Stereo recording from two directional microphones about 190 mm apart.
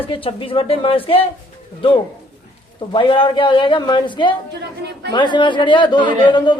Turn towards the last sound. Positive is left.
turn(degrees=25)  # may be behind; listen again after turning